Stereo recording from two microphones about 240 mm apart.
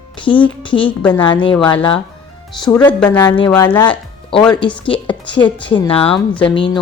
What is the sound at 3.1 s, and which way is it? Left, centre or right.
Speech, centre.